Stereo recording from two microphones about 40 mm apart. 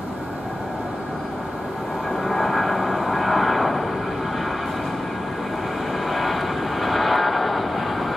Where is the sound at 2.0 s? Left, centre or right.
Centre.